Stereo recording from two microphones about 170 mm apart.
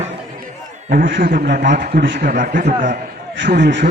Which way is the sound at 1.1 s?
90° right.